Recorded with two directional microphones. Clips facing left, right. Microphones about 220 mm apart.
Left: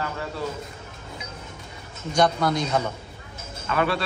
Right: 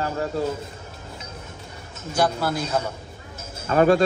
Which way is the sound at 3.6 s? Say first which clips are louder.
Right 7 dB; 40° right (ahead or behind).